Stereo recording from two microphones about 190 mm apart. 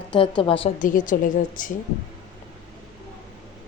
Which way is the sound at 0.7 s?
45° left (ahead or behind).